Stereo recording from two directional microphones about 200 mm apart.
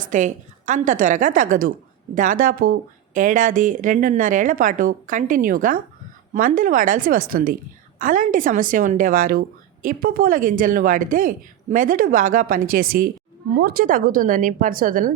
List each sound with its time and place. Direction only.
0.0 s a woman's voice: 40° right (ahead or behind)